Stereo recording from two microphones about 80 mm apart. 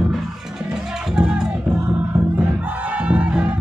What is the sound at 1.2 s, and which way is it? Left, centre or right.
Music, centre.